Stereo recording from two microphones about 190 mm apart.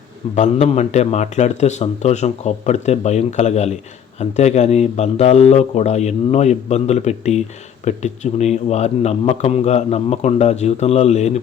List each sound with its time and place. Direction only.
0.3 s a man's voice: 35° left (ahead or behind)